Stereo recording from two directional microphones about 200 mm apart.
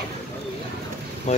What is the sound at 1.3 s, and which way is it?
Speech, 30° left (ahead or behind).